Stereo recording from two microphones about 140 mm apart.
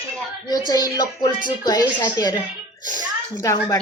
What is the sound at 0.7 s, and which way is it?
Speech, 25° left (ahead or behind).